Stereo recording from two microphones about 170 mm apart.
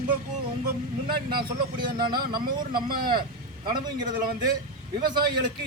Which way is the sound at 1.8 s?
25° right (ahead or behind).